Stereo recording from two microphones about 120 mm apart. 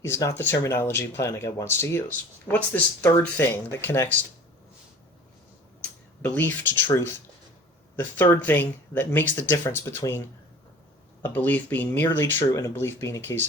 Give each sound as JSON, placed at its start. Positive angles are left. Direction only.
{"t": 0.0, "sound": "speech", "side_deg": 20}
{"t": 5.8, "sound": "speech", "side_deg": 15}